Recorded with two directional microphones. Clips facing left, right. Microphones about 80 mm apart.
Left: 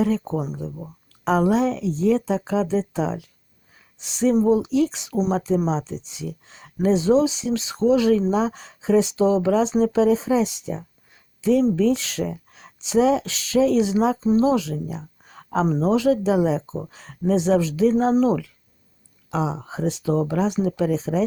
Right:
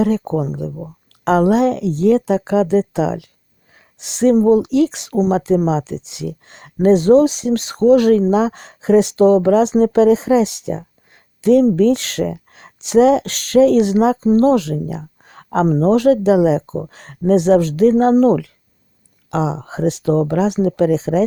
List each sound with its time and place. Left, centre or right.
0.0 s speech: right
15.6 s speech: right
15.9 s speech: right
18.1 s speech: right
19.3 s speech: right